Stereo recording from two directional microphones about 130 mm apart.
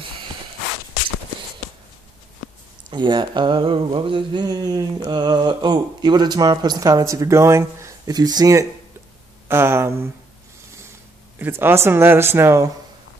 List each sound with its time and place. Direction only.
2.9 s a sound: 35° right (ahead or behind)
9.5 s speech: 20° right (ahead or behind)
11.3 s speech: 15° right (ahead or behind)